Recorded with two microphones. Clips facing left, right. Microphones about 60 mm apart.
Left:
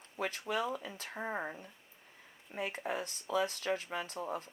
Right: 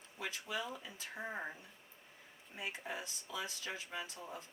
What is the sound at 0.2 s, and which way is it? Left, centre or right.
Speech, left.